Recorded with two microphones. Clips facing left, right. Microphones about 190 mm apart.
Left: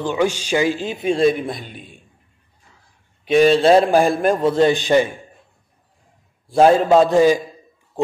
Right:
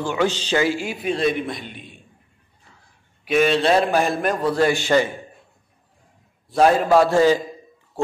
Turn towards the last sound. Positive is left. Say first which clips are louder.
# left 2 dB
turn(degrees=15)  # may be behind; listen again after turning